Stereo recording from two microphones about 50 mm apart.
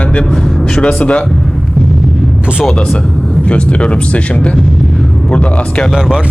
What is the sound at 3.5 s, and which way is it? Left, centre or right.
Speech, left.